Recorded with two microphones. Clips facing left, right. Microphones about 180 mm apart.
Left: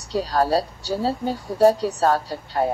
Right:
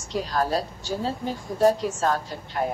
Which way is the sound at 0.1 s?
35° left (ahead or behind).